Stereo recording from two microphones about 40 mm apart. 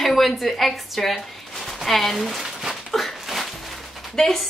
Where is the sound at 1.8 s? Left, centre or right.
Centre.